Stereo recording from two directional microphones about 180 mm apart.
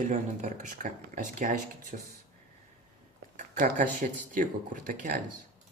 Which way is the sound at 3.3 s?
45° right (ahead or behind).